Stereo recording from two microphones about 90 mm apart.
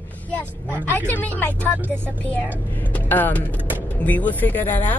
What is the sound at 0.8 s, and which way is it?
Speech, 20° left (ahead or behind).